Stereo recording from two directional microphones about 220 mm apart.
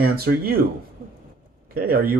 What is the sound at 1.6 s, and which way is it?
Speech, 40° right (ahead or behind).